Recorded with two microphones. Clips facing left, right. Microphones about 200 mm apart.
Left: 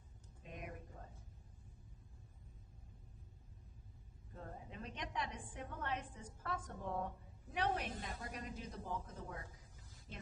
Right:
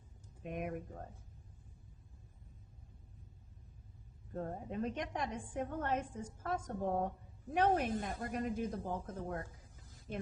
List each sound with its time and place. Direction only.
0.4 s speech: 60° right (ahead or behind)
4.4 s a woman's voice: 45° right (ahead or behind)